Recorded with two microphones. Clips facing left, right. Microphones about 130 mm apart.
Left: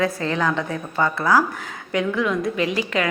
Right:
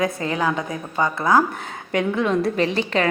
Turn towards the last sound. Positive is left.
turn(degrees=-30)  # may be behind; listen again after turning